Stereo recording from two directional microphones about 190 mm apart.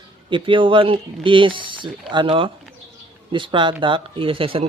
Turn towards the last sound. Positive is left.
turn(degrees=-30)  # may be behind; listen again after turning